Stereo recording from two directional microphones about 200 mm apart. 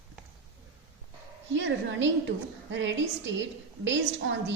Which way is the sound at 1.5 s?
65° right (ahead or behind).